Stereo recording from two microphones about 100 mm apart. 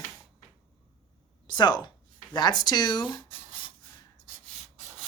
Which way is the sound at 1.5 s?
50° left (ahead or behind).